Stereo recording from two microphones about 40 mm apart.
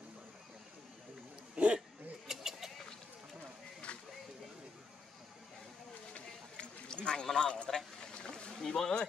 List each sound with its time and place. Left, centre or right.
1.5 s dog: right
2.2 s goat: centre
3.9 s a sound: left
6.5 s run: left
7.2 s speech: centre
7.7 s boat: centre